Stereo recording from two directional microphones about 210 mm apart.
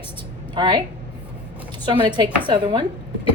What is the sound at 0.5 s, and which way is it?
Speech, 20° right (ahead or behind).